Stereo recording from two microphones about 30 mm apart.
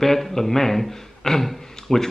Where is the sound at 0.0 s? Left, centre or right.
Centre.